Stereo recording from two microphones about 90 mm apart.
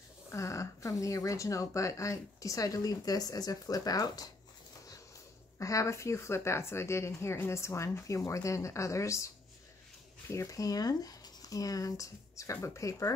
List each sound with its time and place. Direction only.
0.3 s a woman's voice: 35° left (ahead or behind)
5.6 s a woman's voice: 35° left (ahead or behind)